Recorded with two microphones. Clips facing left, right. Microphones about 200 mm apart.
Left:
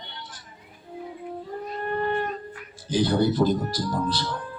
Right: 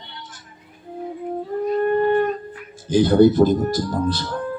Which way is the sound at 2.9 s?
50° right (ahead or behind).